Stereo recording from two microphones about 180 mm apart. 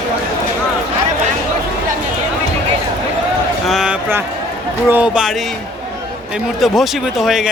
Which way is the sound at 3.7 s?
5° right (ahead or behind).